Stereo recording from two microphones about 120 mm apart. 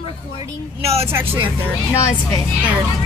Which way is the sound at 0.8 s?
55° right (ahead or behind).